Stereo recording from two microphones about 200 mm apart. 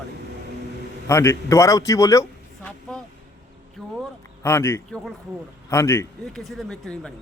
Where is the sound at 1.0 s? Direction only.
15° left (ahead or behind).